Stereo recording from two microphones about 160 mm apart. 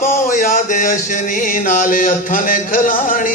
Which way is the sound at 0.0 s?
55° left (ahead or behind).